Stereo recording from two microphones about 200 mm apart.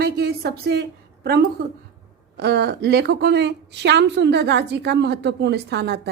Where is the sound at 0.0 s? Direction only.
50° right (ahead or behind).